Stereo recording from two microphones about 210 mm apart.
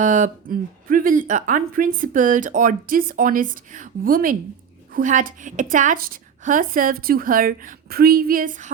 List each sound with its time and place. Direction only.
0.0 s speech: 40° right (ahead or behind)